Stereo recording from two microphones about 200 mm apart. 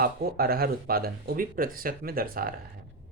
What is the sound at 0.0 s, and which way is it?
Speech, 50° right (ahead or behind).